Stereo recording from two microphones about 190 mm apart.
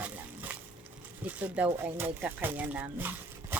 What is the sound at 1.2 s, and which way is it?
Speech, 5° right (ahead or behind).